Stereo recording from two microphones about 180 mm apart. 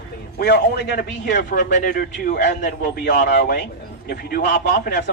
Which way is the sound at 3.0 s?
60° left (ahead or behind).